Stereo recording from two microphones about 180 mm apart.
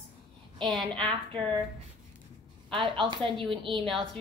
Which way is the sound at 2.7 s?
30° right (ahead or behind).